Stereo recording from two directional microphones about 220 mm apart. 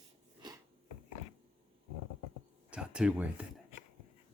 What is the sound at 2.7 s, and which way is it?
Speech, 5° right (ahead or behind).